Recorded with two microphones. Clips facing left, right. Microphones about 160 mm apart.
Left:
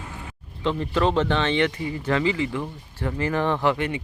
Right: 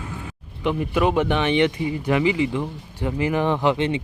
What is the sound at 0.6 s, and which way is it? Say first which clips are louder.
Speech: right 2 dB; 10° right (ahead or behind).